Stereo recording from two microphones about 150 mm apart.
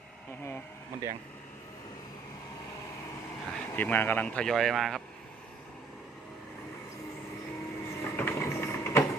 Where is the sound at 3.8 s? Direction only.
10° left (ahead or behind).